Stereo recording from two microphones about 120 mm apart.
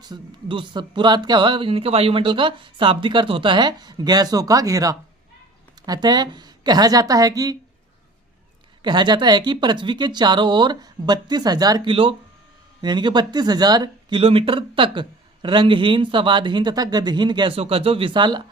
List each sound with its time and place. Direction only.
0.0 s speech: 40° right (ahead or behind)
8.8 s speech: 40° right (ahead or behind)
14.2 s speech: 50° right (ahead or behind)